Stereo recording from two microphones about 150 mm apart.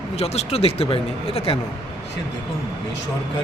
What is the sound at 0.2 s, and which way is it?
Speech, 45° left (ahead or behind).